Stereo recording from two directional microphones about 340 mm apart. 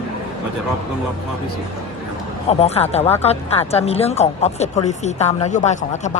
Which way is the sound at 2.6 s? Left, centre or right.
Centre.